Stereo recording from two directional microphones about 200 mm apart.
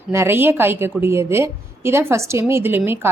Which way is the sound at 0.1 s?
10° right (ahead or behind).